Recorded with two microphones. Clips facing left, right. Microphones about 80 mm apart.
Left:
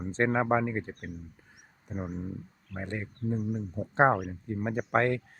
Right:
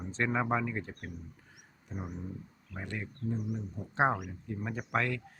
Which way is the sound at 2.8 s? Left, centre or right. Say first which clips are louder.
Left 4 dB; left.